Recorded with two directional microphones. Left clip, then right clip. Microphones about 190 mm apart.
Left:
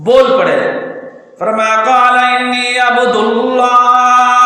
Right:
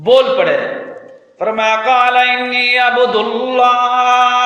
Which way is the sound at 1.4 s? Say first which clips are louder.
Left 3 dB; 30° right (ahead or behind).